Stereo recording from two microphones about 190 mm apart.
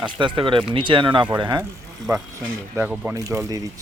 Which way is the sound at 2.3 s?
10° right (ahead or behind).